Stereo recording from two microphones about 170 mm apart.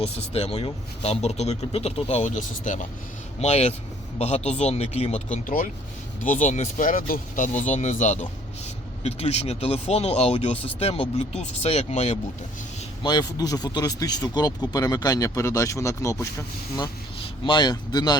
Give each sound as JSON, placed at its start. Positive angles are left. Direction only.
{"t": 0.3, "sound": "speech", "side_deg": 35}
{"t": 13.0, "sound": "speech", "side_deg": 25}
{"t": 17.4, "sound": "speech", "side_deg": 25}